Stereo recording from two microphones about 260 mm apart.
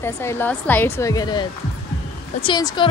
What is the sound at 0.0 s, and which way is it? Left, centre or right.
A woman's voice, centre.